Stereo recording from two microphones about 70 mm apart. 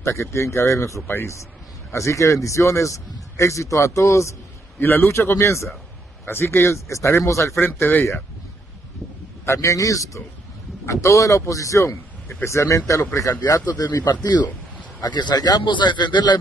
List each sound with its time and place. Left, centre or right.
0.0 s a man's voice: left
1.0 s speech: left
1.9 s a man's voice: left
4.7 s speech: left
7.5 s speech: left
9.5 s a man's voice: left
13.4 s speech: left
13.8 s speech: left
15.0 s speech: left